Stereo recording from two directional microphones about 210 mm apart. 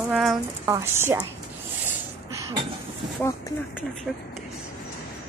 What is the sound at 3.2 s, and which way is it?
Speech, 10° left (ahead or behind).